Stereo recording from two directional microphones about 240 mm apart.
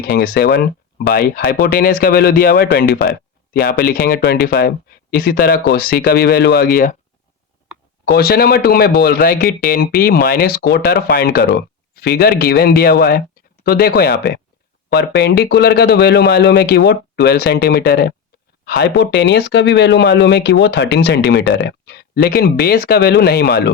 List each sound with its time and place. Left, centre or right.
0.0 s speech: left
8.1 s speech: left